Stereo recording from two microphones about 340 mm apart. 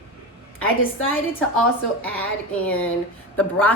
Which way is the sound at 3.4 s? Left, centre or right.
Centre.